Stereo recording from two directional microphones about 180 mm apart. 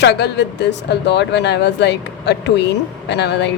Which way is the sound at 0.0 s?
70° left (ahead or behind).